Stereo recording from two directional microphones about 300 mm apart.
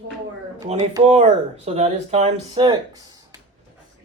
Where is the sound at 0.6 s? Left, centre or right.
Centre.